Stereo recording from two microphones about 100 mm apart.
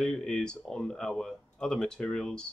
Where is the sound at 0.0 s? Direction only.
5° left (ahead or behind).